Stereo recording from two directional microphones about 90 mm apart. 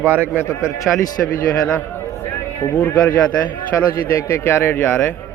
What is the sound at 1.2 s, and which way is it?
Speech, 20° left (ahead or behind).